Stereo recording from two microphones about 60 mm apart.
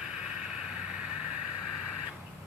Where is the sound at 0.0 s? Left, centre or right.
Centre.